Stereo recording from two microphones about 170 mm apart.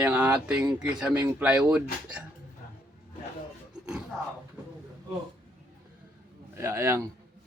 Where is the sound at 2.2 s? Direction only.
5° right (ahead or behind).